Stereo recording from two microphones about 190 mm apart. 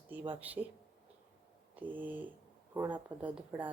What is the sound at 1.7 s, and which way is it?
A woman's voice, 10° right (ahead or behind).